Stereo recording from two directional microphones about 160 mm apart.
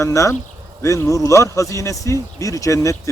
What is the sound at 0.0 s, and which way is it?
Speech, 20° left (ahead or behind).